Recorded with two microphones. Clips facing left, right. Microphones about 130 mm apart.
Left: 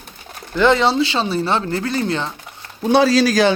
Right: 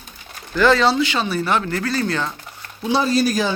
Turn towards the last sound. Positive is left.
turn(degrees=90)